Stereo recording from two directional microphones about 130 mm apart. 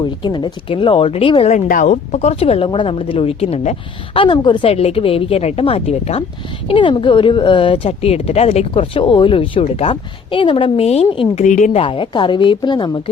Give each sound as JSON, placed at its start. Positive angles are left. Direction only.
{"t": 0.0, "sound": "speech", "side_deg": 35}
{"t": 1.5, "sound": "speech", "side_deg": 75}
{"t": 6.7, "sound": "speech", "side_deg": 40}
{"t": 11.4, "sound": "a woman's voice", "side_deg": 75}
{"t": 11.7, "sound": "speech", "side_deg": 45}